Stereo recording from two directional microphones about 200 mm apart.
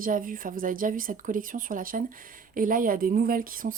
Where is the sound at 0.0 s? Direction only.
45° right (ahead or behind).